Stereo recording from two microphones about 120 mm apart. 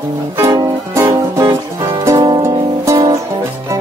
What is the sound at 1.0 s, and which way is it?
Music, 20° right (ahead or behind).